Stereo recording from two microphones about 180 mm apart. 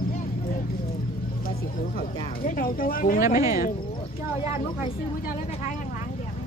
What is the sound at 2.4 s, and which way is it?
Speech, 50° left (ahead or behind).